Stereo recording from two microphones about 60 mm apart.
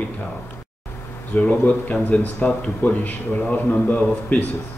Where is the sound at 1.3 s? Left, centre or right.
Left.